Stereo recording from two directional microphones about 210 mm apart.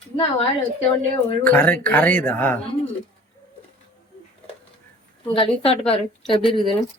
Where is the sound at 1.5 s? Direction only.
10° left (ahead or behind).